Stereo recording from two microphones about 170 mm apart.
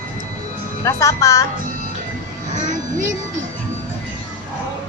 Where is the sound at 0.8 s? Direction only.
20° left (ahead or behind).